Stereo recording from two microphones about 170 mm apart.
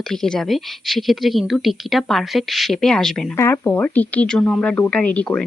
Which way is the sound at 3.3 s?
15° left (ahead or behind).